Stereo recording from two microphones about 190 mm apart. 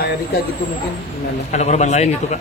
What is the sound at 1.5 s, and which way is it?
Speech, 35° left (ahead or behind).